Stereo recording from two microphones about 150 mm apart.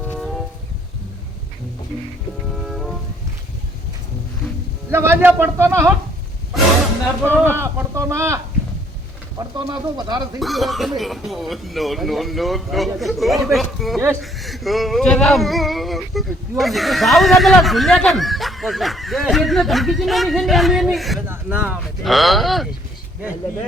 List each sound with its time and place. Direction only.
0.0 s a sound: 5° left (ahead or behind)
2.6 s music: centre (ahead or behind)
4.9 s speech: 15° right (ahead or behind)
7.4 s speech: 15° right (ahead or behind)
9.4 s speech: 30° right (ahead or behind)
10.4 s speech: centre (ahead or behind)